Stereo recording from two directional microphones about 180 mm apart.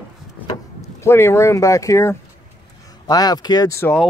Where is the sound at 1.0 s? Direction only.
15° left (ahead or behind).